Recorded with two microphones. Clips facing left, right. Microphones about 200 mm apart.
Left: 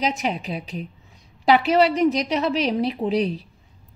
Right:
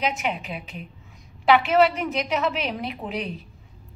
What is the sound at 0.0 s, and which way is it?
A woman's voice, 35° left (ahead or behind).